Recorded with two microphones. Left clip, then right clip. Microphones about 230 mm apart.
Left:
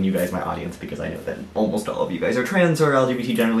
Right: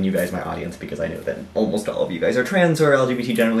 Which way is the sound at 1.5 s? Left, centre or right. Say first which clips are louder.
Right 1 dB; centre.